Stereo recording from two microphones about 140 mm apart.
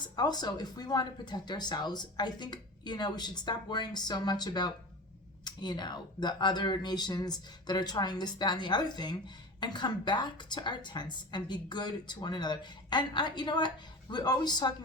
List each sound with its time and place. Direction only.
0.2 s speech: 30° left (ahead or behind)